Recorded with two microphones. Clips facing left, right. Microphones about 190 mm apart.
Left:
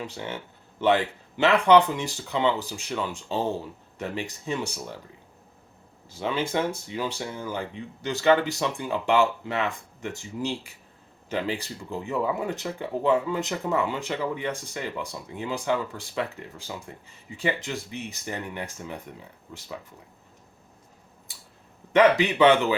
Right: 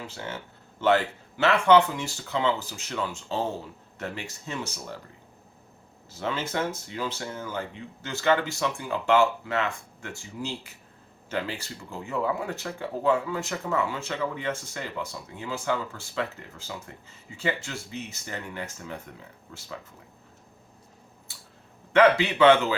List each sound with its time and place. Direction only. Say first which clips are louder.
0.8 s speech: even; 15° left (ahead or behind)
6.1 s speech: left 3 dB; 15° left (ahead or behind)
21.9 s speech: left 1 dB; 15° left (ahead or behind)